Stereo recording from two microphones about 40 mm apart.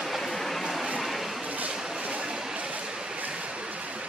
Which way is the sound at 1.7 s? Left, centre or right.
Centre.